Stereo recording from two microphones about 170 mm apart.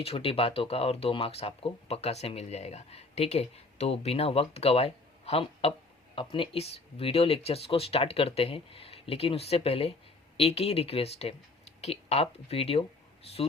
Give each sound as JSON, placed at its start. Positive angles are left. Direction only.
{"t": 0.0, "sound": "speech", "side_deg": 35}